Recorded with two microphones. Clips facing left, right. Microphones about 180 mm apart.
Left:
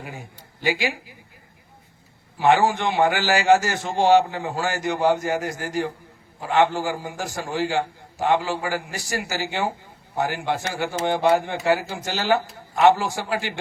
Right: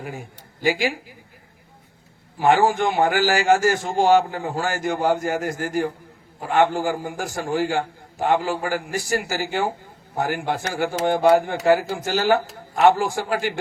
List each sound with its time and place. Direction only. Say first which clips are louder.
0.6 s a man's voice: right 3 dB; 45° right (ahead or behind)
2.4 s a man's voice: right 1 dB; 45° right (ahead or behind)